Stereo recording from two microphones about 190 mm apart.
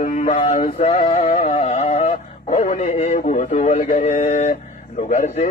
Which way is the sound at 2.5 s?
40° left (ahead or behind).